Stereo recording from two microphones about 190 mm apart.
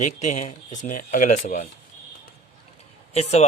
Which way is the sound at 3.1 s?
35° left (ahead or behind).